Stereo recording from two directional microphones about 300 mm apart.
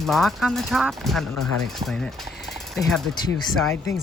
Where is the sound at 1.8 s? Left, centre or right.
Centre.